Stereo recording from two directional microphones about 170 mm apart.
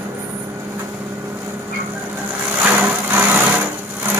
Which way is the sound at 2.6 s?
10° right (ahead or behind).